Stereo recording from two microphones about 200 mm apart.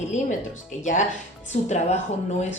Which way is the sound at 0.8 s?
35° left (ahead or behind).